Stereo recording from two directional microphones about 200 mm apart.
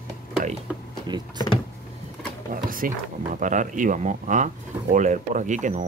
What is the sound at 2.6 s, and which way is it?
Speech, 45° right (ahead or behind).